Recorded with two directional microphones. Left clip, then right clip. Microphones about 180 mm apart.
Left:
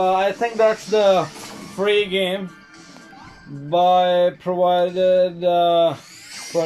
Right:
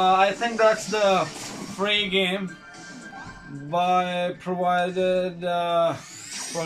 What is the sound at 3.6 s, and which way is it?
Mantra, 30° left (ahead or behind).